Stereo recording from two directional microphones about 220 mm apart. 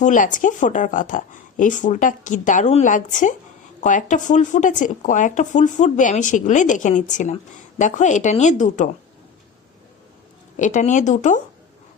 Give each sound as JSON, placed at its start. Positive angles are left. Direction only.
{"t": 0.0, "sound": "speech", "side_deg": 35}
{"t": 10.6, "sound": "speech", "side_deg": 35}